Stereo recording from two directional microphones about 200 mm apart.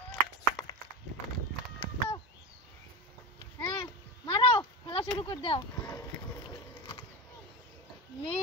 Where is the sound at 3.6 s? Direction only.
25° left (ahead or behind).